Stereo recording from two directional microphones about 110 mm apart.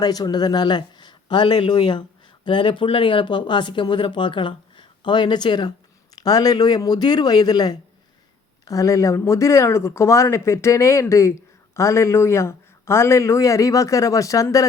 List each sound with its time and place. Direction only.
0.0 s speech: 35° left (ahead or behind)